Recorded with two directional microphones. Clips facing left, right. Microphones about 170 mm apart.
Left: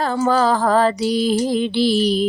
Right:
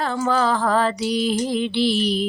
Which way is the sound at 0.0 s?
40° left (ahead or behind).